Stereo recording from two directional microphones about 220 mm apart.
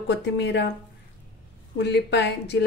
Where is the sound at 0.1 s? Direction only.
50° left (ahead or behind).